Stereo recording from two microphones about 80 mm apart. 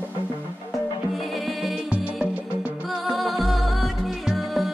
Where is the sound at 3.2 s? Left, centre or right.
Centre.